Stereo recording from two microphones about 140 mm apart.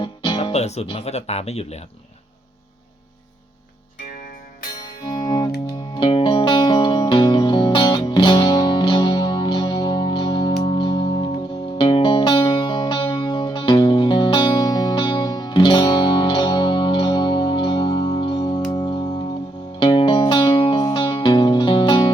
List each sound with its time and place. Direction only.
0.0 s music: 35° left (ahead or behind)
0.5 s speech: 50° left (ahead or behind)
5.0 s music: 30° left (ahead or behind)